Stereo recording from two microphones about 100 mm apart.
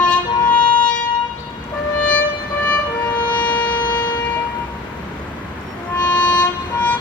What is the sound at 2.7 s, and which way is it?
Siren, 15° left (ahead or behind).